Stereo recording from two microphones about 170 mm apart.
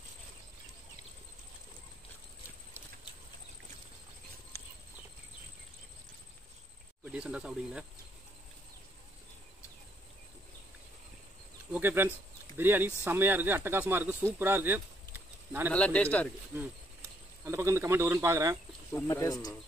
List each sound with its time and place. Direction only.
7.1 s speech: 5° right (ahead or behind)
11.7 s speech: 15° right (ahead or behind)
15.7 s speech: 5° left (ahead or behind)
16.5 s speech: 15° right (ahead or behind)
18.9 s speech: 20° left (ahead or behind)